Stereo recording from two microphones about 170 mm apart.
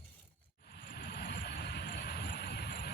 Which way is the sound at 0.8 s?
70° left (ahead or behind).